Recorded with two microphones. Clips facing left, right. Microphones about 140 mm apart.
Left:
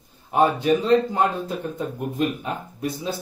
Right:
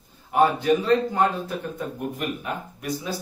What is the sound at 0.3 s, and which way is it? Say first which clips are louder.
Speech: left 1 dB; 20° left (ahead or behind).